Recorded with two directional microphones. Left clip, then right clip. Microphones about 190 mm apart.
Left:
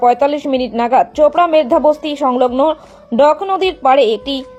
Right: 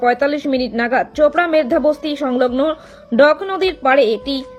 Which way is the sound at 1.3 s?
Centre (ahead or behind).